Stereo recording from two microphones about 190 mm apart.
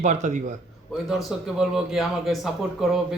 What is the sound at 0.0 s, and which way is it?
Speech, 40° right (ahead or behind).